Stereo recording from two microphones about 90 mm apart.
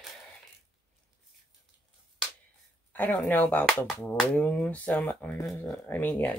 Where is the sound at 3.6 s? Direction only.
5° left (ahead or behind).